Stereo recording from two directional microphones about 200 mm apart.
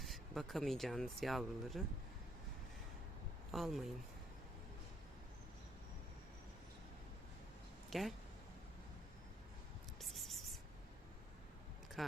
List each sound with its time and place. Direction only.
0.0 s speech: centre (ahead or behind)
3.5 s speech: centre (ahead or behind)
7.9 s speech: centre (ahead or behind)
10.0 s a sound: centre (ahead or behind)
12.0 s speech: centre (ahead or behind)